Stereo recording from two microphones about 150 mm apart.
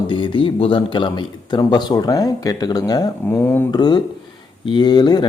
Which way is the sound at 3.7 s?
30° left (ahead or behind).